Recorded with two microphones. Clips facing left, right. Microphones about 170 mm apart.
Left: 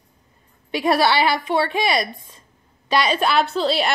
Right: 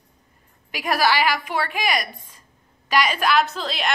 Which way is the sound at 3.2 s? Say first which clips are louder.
Left 2 dB; 30° left (ahead or behind).